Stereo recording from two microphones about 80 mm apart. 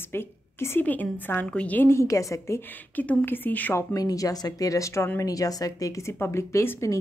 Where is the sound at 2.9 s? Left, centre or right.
Left.